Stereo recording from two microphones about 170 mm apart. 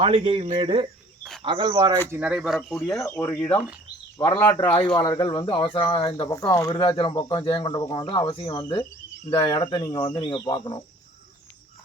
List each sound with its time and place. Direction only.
0.0 s speech: 30° right (ahead or behind)
2.0 s speech: 10° right (ahead or behind)
3.0 s speech: 20° left (ahead or behind)
4.6 s speech: 30° left (ahead or behind)
6.2 s speech: 20° left (ahead or behind)